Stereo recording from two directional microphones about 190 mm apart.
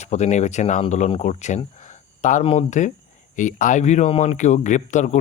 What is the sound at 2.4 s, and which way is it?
Speech, 35° left (ahead or behind).